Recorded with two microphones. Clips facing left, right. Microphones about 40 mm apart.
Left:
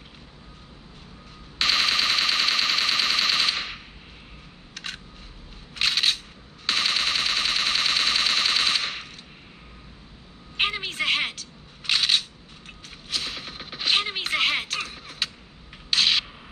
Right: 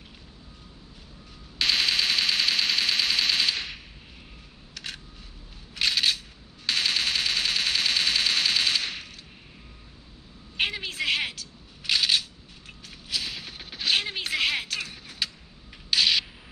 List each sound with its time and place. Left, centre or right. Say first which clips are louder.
1.6 s a sound: left 2 dB; centre
4.7 s single-lens reflex camera: left 2 dB; centre
5.8 s machine gun: left 1 dB; centre
10.6 s single-lens reflex camera: left 2 dB; centre
13.1 s music: left 1 dB; centre
15.9 s a sound: left 1 dB; centre